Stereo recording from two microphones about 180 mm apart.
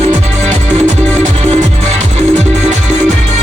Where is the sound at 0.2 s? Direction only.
40° right (ahead or behind).